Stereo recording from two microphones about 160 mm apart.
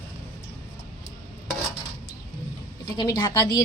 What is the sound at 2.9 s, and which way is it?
Speech, 30° left (ahead or behind).